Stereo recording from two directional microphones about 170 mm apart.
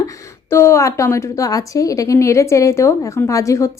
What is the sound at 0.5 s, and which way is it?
Speech, 15° left (ahead or behind).